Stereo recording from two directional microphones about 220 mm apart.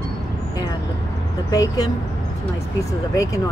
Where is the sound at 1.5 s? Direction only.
15° left (ahead or behind).